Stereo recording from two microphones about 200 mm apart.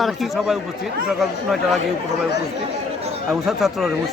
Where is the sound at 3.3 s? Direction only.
Centre (ahead or behind).